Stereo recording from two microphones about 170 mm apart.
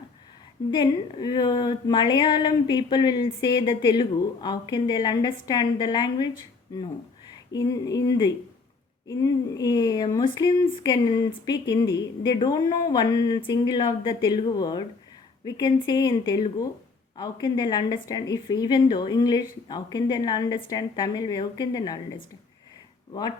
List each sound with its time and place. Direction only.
0.7 s speech: 25° left (ahead or behind)
7.5 s speech: 20° left (ahead or behind)